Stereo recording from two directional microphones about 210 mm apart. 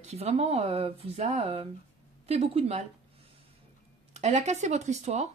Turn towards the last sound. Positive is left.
turn(degrees=-30)  # may be behind; listen again after turning